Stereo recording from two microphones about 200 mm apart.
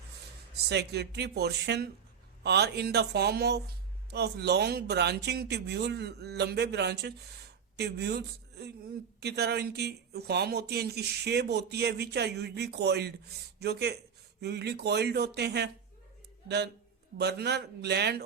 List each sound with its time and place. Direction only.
0.7 s speech: 55° right (ahead or behind)
17.2 s speech: 55° right (ahead or behind)